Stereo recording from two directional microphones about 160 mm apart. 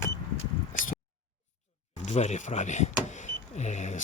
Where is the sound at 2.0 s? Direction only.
45° left (ahead or behind).